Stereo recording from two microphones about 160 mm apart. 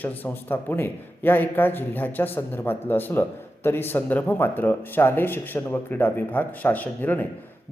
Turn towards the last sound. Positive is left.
turn(degrees=10)  # may be behind; listen again after turning